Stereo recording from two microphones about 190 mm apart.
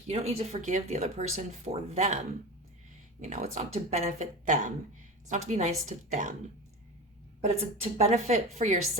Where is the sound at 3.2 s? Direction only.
40° right (ahead or behind).